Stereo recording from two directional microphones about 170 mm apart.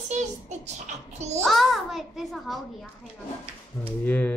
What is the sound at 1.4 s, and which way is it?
A child's voice, centre (ahead or behind).